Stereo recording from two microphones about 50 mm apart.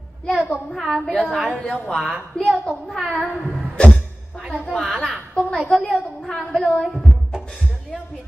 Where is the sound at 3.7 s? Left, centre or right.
Centre.